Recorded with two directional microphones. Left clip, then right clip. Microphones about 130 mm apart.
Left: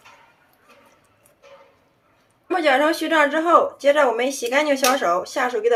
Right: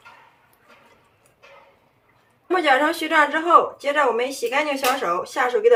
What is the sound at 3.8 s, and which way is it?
Speech, 35° left (ahead or behind).